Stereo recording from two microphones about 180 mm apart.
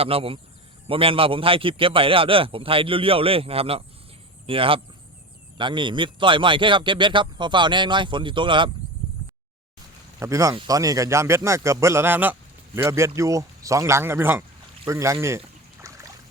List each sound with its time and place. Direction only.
0.0 s a man's voice: 30° right (ahead or behind)
10.2 s a man's voice: 15° right (ahead or behind)
15.9 s a sound: 15° right (ahead or behind)